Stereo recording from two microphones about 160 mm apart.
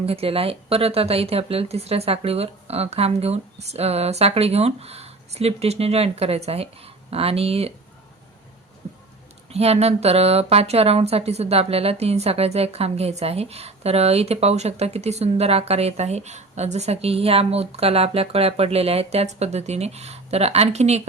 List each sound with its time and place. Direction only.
0.0 s speech: 40° right (ahead or behind)
9.5 s speech: 40° right (ahead or behind)